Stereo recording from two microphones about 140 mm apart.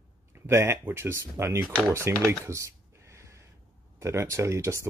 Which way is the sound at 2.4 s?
20° right (ahead or behind).